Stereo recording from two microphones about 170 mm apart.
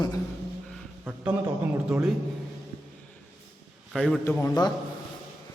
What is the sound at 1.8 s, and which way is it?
Speech, 5° right (ahead or behind).